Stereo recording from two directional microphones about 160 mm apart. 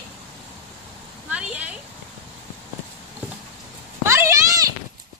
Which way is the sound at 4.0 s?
15° right (ahead or behind).